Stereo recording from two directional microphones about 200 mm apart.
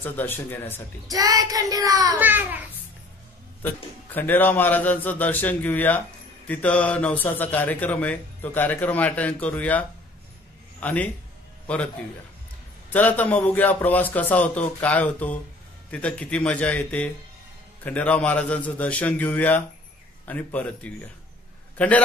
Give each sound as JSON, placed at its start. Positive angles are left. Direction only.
{"t": 0.0, "sound": "a man's voice", "side_deg": 10}
{"t": 1.1, "sound": "a child's voice", "side_deg": -20}
{"t": 3.6, "sound": "a man's voice", "side_deg": 10}